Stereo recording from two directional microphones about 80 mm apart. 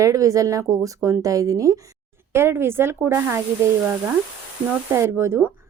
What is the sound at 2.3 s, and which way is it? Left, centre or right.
Speech, right.